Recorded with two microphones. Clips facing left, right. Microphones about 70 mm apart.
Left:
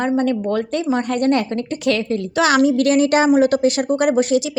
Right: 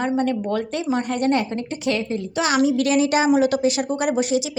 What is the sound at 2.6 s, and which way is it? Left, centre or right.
A woman's voice, left.